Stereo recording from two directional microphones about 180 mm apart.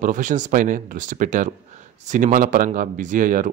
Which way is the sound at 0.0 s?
45° right (ahead or behind).